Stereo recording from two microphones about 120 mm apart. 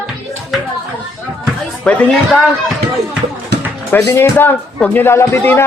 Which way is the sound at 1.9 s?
5° left (ahead or behind).